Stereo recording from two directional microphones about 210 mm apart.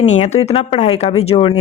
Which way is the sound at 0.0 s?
30° left (ahead or behind).